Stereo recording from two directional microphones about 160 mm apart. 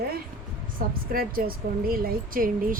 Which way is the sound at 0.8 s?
60° right (ahead or behind).